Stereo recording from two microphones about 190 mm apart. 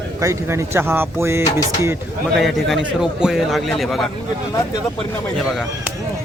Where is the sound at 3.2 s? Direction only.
Centre (ahead or behind).